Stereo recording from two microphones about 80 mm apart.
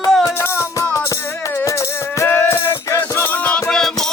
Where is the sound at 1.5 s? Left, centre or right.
Left.